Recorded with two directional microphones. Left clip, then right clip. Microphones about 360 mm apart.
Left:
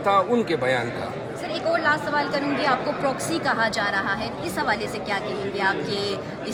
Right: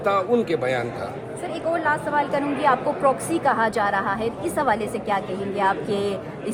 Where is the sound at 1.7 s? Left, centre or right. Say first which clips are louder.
Even; right.